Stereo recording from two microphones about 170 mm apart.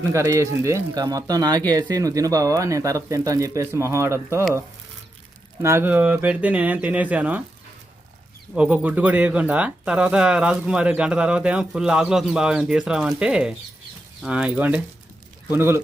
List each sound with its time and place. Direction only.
0.0 s speech: 15° right (ahead or behind)
5.6 s speech: 15° right (ahead or behind)
8.5 s speech: 5° right (ahead or behind)